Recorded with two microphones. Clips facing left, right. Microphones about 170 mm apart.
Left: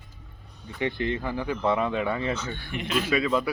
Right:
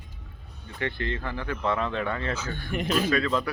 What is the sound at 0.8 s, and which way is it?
Speech, 15° left (ahead or behind).